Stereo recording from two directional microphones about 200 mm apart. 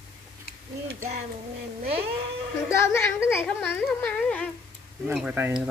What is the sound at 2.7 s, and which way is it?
Carnatic music, 15° left (ahead or behind).